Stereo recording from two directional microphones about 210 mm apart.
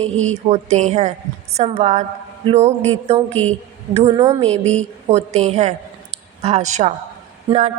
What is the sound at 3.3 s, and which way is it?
Speech, 5° left (ahead or behind).